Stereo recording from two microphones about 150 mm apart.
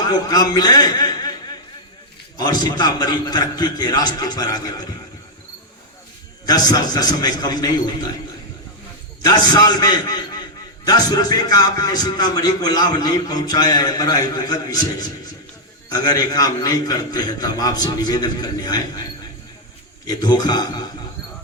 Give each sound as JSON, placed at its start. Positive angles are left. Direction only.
{"t": 0.0, "sound": "a man's voice", "side_deg": 25}
{"t": 2.4, "sound": "a man's voice", "side_deg": 25}
{"t": 6.4, "sound": "a man's voice", "side_deg": 25}
{"t": 9.2, "sound": "a man's voice", "side_deg": 25}
{"t": 20.1, "sound": "a man's voice", "side_deg": 25}